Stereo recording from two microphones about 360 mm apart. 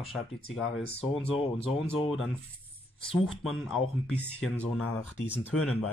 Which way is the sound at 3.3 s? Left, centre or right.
Centre.